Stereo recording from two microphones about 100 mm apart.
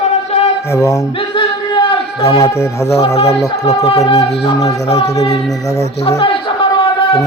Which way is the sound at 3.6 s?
75° left (ahead or behind).